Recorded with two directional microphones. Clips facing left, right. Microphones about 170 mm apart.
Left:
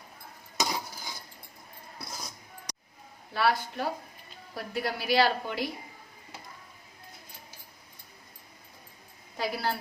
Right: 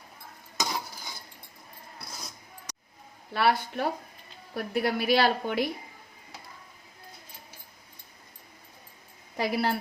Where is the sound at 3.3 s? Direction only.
60° right (ahead or behind).